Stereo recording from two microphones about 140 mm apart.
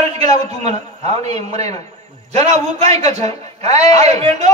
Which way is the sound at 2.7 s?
50° right (ahead or behind).